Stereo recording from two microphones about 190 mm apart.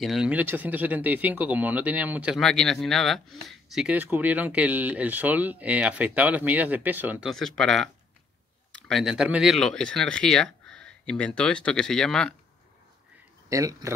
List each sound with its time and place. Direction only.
0.0 s speech: centre (ahead or behind)
13.5 s speech: 20° right (ahead or behind)